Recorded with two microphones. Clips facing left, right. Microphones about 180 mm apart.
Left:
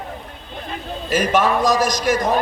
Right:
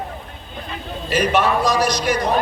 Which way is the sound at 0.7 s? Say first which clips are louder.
Left 2 dB; 45° left (ahead or behind).